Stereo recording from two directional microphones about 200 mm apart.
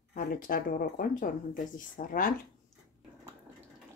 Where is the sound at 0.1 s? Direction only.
45° left (ahead or behind).